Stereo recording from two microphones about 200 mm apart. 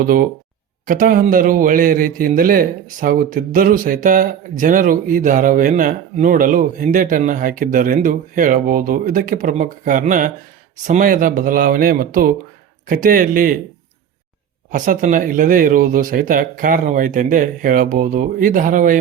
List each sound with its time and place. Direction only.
0.0 s a man's voice: 45° right (ahead or behind)
14.7 s speech: 40° right (ahead or behind)